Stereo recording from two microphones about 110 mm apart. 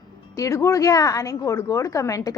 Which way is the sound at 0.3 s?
30° left (ahead or behind).